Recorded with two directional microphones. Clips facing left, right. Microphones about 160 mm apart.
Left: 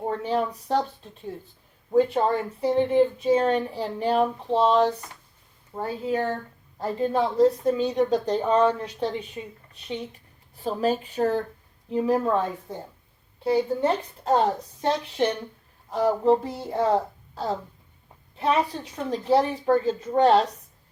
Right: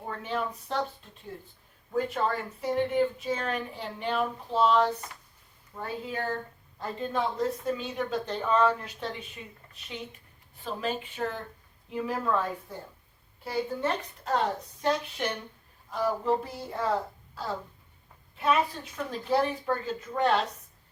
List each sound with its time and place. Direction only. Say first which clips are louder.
0.0 s speech: left 7 dB; 35° left (ahead or behind)
1.9 s speech: left 8 dB; 30° left (ahead or behind)
10.6 s a woman's voice: left 8 dB; 40° left (ahead or behind)
18.9 s speech: left 5 dB; 30° left (ahead or behind)